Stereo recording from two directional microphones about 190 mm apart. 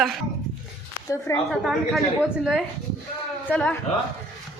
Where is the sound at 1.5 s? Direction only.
Centre (ahead or behind).